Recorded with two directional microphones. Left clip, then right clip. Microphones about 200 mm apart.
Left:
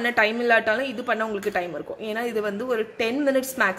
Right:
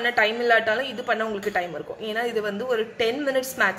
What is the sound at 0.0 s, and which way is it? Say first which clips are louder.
A woman's voice: even; 25° left (ahead or behind).